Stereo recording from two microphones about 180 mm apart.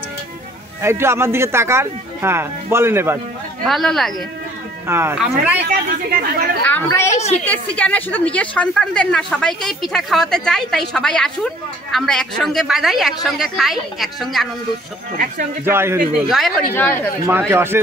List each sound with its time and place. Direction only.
0.8 s speech: 15° right (ahead or behind)
3.6 s a woman's voice: centre (ahead or behind)
4.8 s a woman's voice: 15° right (ahead or behind)
5.7 s a woman's voice: 50° right (ahead or behind)
6.6 s a woman's voice: 10° left (ahead or behind)
7.2 s a woman's voice: 40° left (ahead or behind)
7.4 s a woman's voice: 10° left (ahead or behind)
15.6 s speech: 15° right (ahead or behind)
16.3 s a woman's voice: centre (ahead or behind)
17.5 s speech: 15° right (ahead or behind)